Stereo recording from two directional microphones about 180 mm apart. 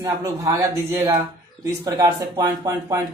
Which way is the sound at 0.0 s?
20° right (ahead or behind).